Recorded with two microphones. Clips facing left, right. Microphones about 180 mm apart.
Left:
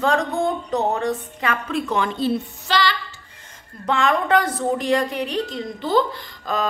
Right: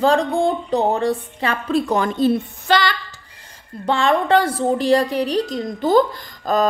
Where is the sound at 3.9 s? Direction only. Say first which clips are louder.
Right 3 dB; 30° right (ahead or behind).